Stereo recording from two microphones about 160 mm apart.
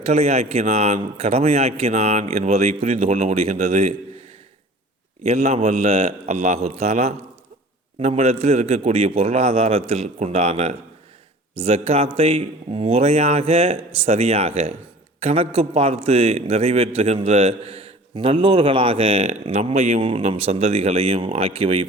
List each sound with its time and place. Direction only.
0.0 s a man's voice: 40° right (ahead or behind)
5.2 s a man's voice: 40° right (ahead or behind)